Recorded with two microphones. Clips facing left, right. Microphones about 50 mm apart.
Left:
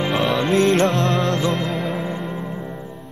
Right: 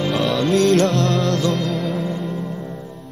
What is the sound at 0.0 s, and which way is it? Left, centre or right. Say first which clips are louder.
Music: even; centre.